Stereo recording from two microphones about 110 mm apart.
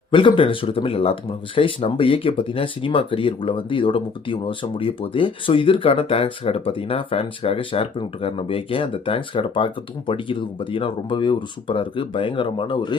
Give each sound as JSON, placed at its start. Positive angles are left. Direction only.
{"t": 0.1, "sound": "speech", "side_deg": 50}